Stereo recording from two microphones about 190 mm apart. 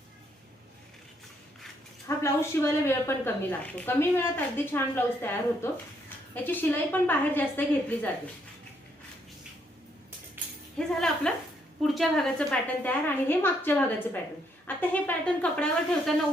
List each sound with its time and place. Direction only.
2.0 s a woman's voice: 15° left (ahead or behind)
10.8 s a woman's voice: 5° left (ahead or behind)